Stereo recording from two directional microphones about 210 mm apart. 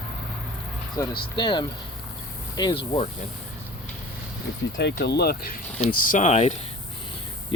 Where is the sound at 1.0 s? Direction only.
15° left (ahead or behind).